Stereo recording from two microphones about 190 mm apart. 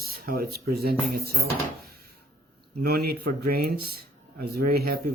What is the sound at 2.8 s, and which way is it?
Speech, 55° right (ahead or behind).